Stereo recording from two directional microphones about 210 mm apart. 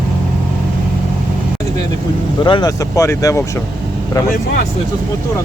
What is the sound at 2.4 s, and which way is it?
Speech, 20° left (ahead or behind).